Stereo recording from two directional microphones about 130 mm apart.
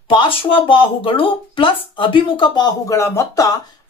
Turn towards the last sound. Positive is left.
turn(degrees=25)  # may be behind; listen again after turning